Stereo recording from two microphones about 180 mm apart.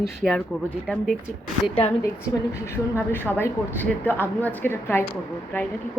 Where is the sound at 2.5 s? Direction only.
15° left (ahead or behind).